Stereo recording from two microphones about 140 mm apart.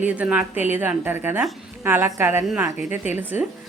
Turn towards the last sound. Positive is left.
turn(degrees=-15)  # may be behind; listen again after turning